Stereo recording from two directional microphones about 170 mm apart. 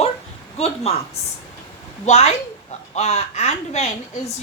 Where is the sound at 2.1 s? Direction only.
40° left (ahead or behind).